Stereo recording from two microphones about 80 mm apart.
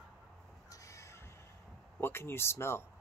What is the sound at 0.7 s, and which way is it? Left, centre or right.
Crow, left.